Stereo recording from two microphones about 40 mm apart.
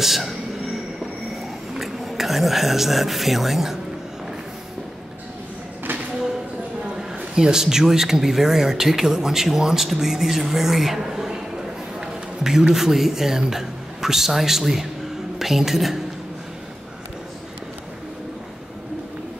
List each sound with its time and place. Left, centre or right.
0.0 s a sound: centre
2.0 s speech: centre
7.3 s a man's voice: centre